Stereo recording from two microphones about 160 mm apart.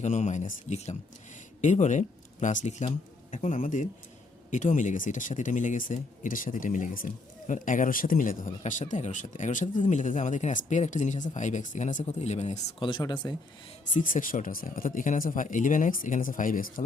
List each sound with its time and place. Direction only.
0.0 s speech: 45° left (ahead or behind)
12.8 s speech: 30° left (ahead or behind)
13.9 s speech: 55° left (ahead or behind)